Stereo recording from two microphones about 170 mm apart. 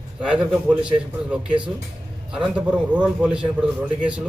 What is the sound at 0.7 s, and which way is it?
A man's voice, 5° right (ahead or behind).